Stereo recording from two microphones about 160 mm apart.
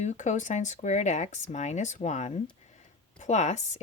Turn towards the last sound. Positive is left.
turn(degrees=45)  # may be behind; listen again after turning